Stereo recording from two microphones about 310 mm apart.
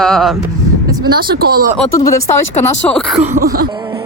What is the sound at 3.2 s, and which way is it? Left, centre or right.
Speech, right.